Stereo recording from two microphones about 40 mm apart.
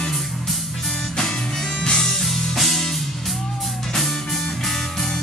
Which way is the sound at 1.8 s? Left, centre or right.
Centre.